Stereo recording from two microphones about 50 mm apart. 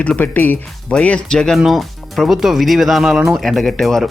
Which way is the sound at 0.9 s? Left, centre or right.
Left.